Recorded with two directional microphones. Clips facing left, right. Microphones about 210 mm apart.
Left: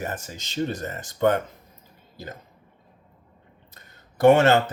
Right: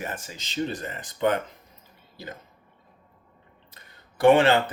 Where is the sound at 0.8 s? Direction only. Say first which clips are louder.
Left 3 dB; 45° left (ahead or behind).